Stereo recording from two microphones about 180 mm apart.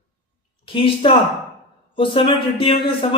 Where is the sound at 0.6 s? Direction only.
30° left (ahead or behind).